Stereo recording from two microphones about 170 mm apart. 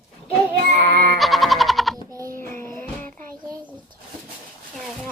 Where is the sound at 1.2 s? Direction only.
Centre (ahead or behind).